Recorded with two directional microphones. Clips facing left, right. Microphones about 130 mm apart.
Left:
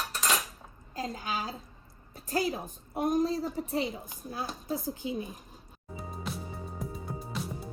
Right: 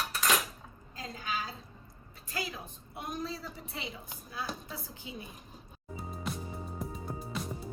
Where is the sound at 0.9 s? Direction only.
40° left (ahead or behind).